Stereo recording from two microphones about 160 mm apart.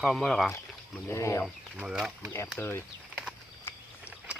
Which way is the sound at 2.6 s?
15° left (ahead or behind).